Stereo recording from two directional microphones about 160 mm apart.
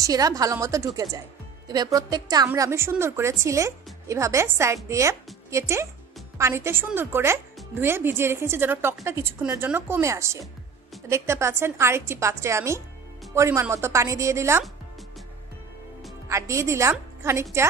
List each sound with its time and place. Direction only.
0.0 s a woman's voice: 25° right (ahead or behind)
16.3 s a woman's voice: 20° right (ahead or behind)